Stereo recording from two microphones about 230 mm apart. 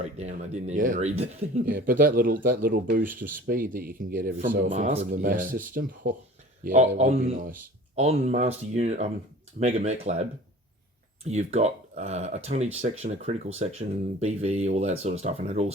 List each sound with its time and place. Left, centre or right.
0.0 s speech: right
11.3 s speech: right